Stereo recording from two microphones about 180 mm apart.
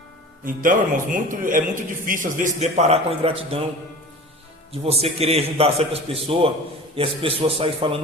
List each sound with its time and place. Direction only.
0.4 s a man's voice: 50° right (ahead or behind); by 3.7 s 30° right (ahead or behind)
4.7 s a man's voice: 35° right (ahead or behind)